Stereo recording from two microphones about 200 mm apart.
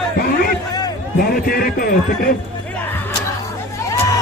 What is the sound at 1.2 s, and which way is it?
Speech, 45° left (ahead or behind).